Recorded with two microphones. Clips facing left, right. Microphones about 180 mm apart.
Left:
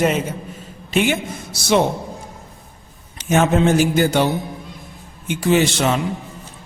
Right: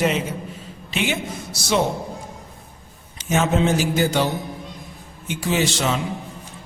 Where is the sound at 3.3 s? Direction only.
55° left (ahead or behind).